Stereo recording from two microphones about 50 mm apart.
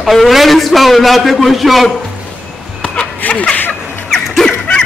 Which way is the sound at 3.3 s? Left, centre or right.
Left.